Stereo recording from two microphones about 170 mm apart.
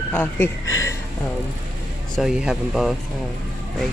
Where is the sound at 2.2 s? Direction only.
5° right (ahead or behind).